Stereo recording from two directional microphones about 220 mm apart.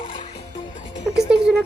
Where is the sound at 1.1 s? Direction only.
5° right (ahead or behind).